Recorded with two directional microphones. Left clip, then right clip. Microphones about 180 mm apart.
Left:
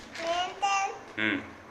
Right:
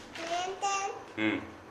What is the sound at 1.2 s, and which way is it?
Speech, 15° right (ahead or behind).